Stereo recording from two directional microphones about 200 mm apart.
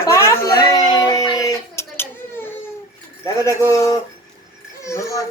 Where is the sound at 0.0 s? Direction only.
15° left (ahead or behind).